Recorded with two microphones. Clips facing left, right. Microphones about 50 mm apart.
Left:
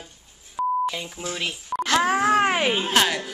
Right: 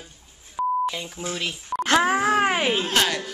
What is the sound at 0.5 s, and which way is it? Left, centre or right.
Beep, centre.